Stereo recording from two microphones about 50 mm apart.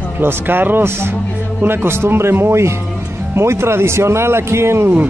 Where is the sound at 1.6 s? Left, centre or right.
Right.